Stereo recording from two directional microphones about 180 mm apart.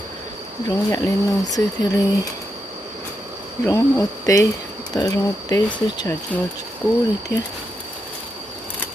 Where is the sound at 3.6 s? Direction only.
20° left (ahead or behind).